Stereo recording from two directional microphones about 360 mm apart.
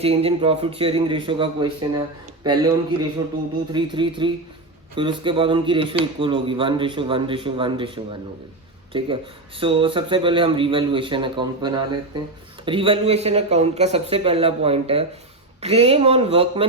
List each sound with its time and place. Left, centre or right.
0.0 s a man's voice: centre
3.7 s speech: centre